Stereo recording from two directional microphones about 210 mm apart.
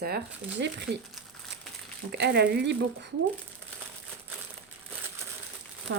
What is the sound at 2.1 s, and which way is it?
Speech, 50° right (ahead or behind).